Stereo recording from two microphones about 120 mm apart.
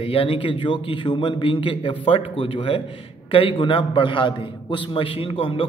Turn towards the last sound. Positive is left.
turn(degrees=50)  # may be behind; listen again after turning